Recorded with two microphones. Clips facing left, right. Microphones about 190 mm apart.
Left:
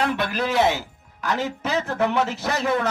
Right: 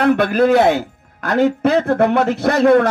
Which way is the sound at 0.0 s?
55° right (ahead or behind).